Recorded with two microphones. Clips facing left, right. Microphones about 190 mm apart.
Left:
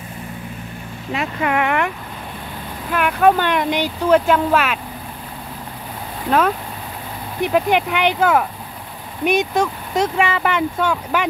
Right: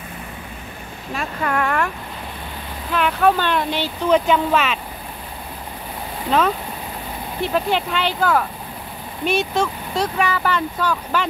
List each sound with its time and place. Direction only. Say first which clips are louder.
1.1 s speech: left 3 dB; 15° left (ahead or behind)
2.9 s speech: left 2 dB; 10° left (ahead or behind)
7.4 s speech: left 4 dB; 15° left (ahead or behind)